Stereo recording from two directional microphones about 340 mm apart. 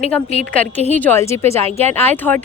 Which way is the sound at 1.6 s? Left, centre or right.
Centre.